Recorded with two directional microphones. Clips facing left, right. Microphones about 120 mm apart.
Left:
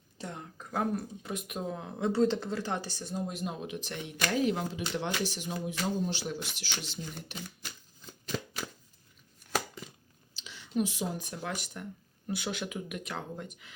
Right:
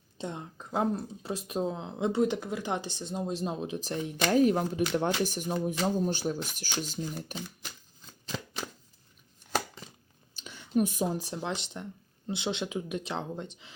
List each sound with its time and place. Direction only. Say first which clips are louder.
0.2 s speech: right 4 dB; 20° right (ahead or behind); by 7.3 s 45° right (ahead or behind)
10.4 s speech: right 4 dB; 50° right (ahead or behind); by 13.7 s 30° right (ahead or behind)